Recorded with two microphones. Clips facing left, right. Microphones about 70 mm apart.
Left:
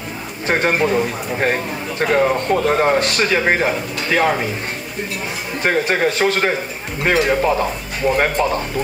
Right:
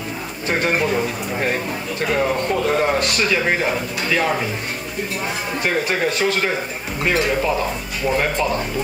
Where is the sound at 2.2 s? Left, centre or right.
Left.